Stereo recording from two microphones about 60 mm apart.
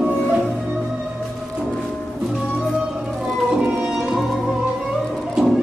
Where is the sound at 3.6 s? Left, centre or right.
Centre.